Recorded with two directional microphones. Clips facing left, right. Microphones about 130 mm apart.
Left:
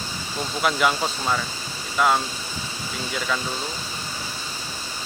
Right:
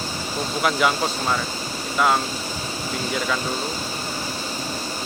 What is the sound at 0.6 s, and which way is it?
Speech, centre (ahead or behind).